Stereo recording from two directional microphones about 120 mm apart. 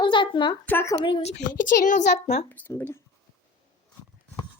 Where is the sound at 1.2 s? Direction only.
70° left (ahead or behind).